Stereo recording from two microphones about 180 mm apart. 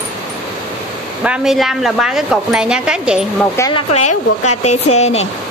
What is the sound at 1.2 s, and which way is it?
Speech, 5° right (ahead or behind).